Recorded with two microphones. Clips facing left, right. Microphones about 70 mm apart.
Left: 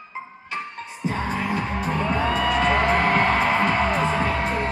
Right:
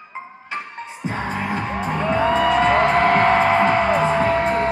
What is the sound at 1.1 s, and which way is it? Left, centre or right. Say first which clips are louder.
Music: right 1 dB; right.